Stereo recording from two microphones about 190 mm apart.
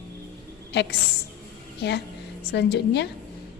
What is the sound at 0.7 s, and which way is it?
A woman's voice, 60° left (ahead or behind).